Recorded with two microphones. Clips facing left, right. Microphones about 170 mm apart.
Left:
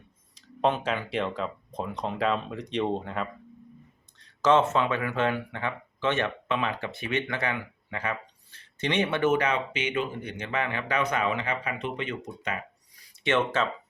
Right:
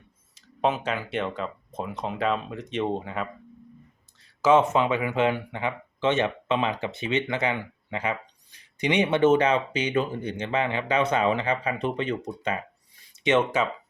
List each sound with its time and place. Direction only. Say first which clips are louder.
0.3 s speech: even; 5° right (ahead or behind)